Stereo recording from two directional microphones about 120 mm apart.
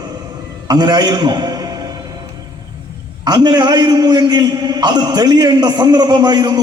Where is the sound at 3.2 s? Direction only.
35° right (ahead or behind).